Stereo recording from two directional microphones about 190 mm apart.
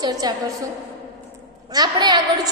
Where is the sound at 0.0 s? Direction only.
20° right (ahead or behind).